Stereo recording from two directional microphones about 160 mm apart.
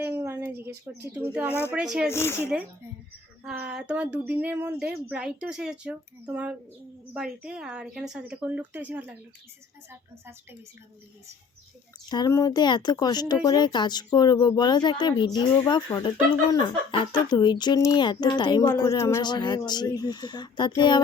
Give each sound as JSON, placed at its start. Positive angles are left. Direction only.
{"t": 0.0, "sound": "a sound", "side_deg": -15}
{"t": 0.9, "sound": "speech", "side_deg": -15}
{"t": 1.5, "sound": "speech", "side_deg": 15}
{"t": 1.7, "sound": "speech", "side_deg": -5}
{"t": 2.0, "sound": "speech", "side_deg": 15}
{"t": 3.4, "sound": "speech", "side_deg": -5}
{"t": 12.0, "sound": "speech", "side_deg": 25}